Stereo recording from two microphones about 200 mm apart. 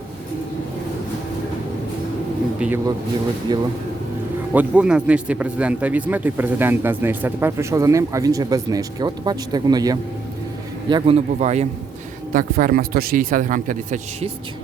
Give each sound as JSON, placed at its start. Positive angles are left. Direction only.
{"t": 2.6, "sound": "speech", "side_deg": -10}
{"t": 4.5, "sound": "a man's voice", "side_deg": -5}